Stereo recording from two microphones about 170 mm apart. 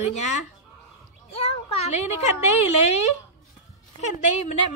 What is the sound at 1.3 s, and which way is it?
A child's voice, 35° left (ahead or behind).